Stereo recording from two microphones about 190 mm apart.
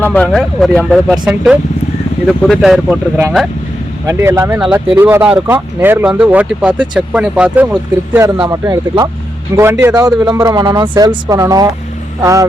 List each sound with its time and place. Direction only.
0.0 s speech: 10° left (ahead or behind); by 12.5 s 15° right (ahead or behind)